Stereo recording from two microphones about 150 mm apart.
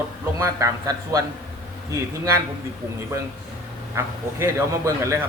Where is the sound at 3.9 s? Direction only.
15° right (ahead or behind).